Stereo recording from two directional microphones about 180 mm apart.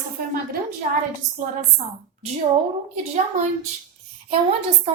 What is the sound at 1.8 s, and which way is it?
Speech, 40° right (ahead or behind).